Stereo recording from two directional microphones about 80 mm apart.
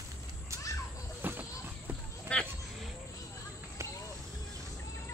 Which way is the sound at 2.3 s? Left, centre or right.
Centre.